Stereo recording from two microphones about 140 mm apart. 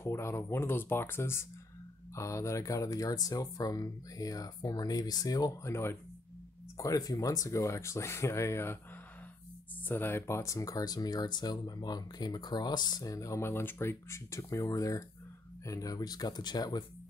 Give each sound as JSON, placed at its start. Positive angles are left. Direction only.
{"t": 0.0, "sound": "speech", "side_deg": 20}
{"t": 9.8, "sound": "speech", "side_deg": 15}